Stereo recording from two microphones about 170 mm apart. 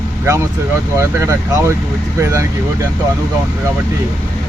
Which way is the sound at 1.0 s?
15° right (ahead or behind).